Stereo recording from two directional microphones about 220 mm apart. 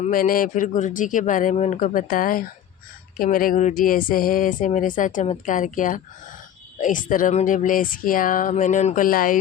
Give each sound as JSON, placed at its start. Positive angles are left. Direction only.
{"t": 0.0, "sound": "speech", "side_deg": 40}